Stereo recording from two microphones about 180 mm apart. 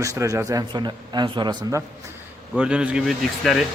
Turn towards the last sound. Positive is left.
turn(degrees=0)  # may be behind; listen again after turning